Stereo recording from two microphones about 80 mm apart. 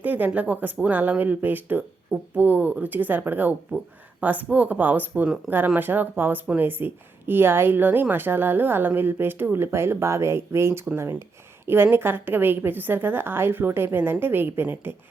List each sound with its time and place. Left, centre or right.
0.0 s speech: right